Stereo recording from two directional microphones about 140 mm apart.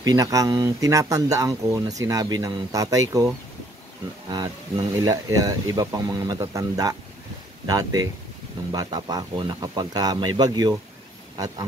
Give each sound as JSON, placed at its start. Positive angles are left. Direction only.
{"t": 0.0, "sound": "speech", "side_deg": -25}
{"t": 5.0, "sound": "speech", "side_deg": -25}